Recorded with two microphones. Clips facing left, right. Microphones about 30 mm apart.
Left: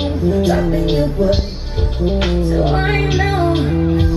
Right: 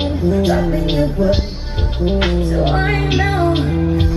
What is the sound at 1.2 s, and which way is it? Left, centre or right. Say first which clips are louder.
Music: even; centre.